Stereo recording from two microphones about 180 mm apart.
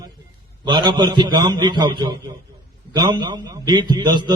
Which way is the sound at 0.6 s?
25° right (ahead or behind).